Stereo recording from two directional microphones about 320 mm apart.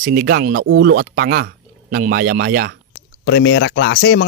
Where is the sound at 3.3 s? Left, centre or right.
Left.